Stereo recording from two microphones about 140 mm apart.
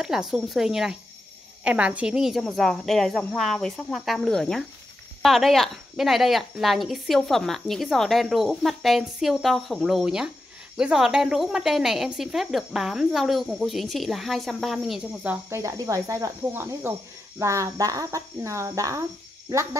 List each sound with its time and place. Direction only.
0.0 s a woman's voice: 5° right (ahead or behind)
15.5 s speech: 25° right (ahead or behind)